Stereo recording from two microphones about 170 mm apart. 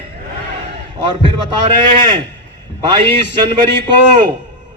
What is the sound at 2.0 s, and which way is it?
Speech, 25° right (ahead or behind).